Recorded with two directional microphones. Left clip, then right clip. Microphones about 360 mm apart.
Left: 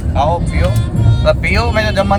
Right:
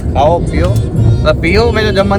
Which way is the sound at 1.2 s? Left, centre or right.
Centre.